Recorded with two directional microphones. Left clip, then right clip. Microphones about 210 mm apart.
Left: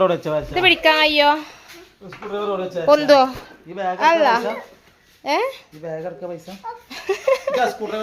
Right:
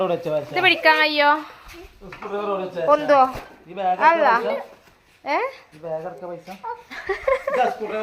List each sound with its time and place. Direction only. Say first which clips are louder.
0.0 s speech: left 4 dB; 40° left (ahead or behind)
0.5 s a woman's voice: left 1 dB; 20° left (ahead or behind)
2.8 s a woman's voice: left 3 dB; 30° left (ahead or behind)
5.8 s speech: left 1 dB; 40° left (ahead or behind)
6.9 s a sound: left 3 dB; 20° left (ahead or behind)